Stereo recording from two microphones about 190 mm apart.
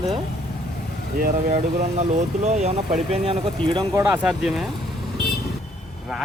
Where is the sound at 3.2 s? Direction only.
30° right (ahead or behind).